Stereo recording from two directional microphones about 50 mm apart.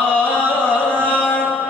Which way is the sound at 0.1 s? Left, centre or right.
Left.